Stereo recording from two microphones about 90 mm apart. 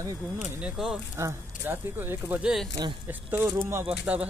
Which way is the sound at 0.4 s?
10° right (ahead or behind).